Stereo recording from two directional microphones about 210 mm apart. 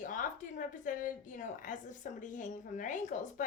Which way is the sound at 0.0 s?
40° left (ahead or behind).